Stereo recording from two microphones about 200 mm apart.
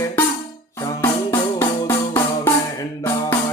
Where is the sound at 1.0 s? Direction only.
10° left (ahead or behind).